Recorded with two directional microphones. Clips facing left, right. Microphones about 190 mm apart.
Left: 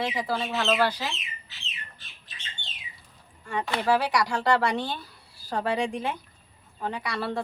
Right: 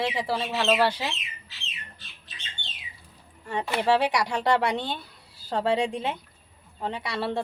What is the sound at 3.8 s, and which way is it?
A woman's voice, 25° right (ahead or behind).